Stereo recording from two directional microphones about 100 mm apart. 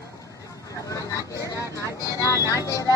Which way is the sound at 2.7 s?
35° left (ahead or behind).